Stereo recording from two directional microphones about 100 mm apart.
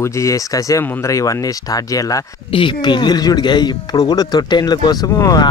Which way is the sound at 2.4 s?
55° left (ahead or behind).